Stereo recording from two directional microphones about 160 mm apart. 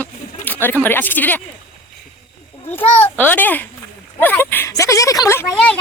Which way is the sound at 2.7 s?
10° left (ahead or behind).